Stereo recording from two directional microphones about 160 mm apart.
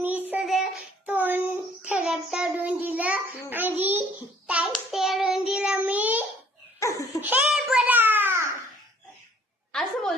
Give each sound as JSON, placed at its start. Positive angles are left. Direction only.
{"t": 0.0, "sound": "child singing", "side_deg": -10}
{"t": 3.5, "sound": "music", "side_deg": -10}
{"t": 4.4, "sound": "child singing", "side_deg": -10}
{"t": 6.7, "sound": "laughter", "side_deg": 20}
{"t": 7.2, "sound": "babbling", "side_deg": -10}
{"t": 9.7, "sound": "a sound", "side_deg": 0}